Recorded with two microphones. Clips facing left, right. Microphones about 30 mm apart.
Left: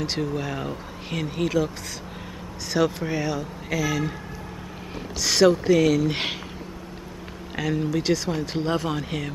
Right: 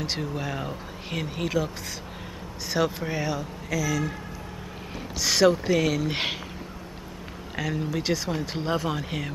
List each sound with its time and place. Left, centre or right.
0.0 s speech: centre
2.7 s speech: centre
3.7 s speech: left
5.2 s speech: centre
7.5 s speech: centre